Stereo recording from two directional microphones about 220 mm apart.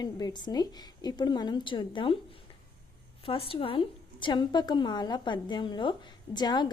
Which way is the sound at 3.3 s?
25° left (ahead or behind).